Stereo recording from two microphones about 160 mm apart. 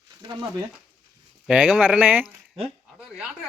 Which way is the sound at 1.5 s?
10° right (ahead or behind).